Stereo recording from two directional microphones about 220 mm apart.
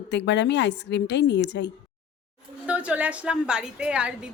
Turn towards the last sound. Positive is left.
turn(degrees=-5)  # may be behind; listen again after turning